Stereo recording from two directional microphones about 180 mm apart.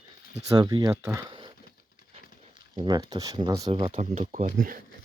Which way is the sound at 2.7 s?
25° right (ahead or behind).